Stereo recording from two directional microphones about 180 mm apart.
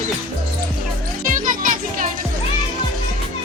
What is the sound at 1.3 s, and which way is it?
Music, 45° right (ahead or behind).